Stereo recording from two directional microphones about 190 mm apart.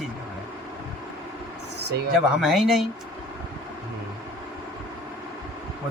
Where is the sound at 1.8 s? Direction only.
60° right (ahead or behind).